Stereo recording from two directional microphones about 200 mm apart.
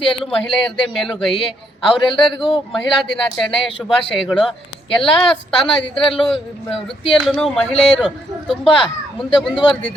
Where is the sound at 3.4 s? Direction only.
Centre (ahead or behind).